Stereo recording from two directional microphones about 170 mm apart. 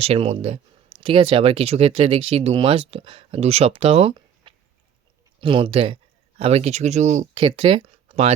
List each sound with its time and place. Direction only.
0.0 s speech: 35° right (ahead or behind)
7.3 s speech: 30° right (ahead or behind)